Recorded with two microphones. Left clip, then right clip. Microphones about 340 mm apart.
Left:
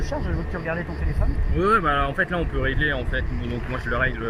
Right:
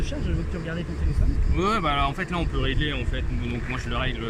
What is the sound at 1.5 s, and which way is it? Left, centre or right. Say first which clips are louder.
Speech: left 4 dB; centre.